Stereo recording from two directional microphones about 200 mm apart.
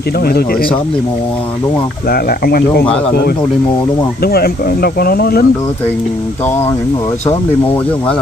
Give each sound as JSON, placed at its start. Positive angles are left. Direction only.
{"t": 0.2, "sound": "speech", "side_deg": 50}
{"t": 2.0, "sound": "speech", "side_deg": 50}
{"t": 4.2, "sound": "speech", "side_deg": 50}